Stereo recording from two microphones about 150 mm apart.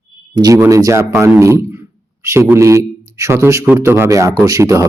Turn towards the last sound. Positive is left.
turn(degrees=-20)  # may be behind; listen again after turning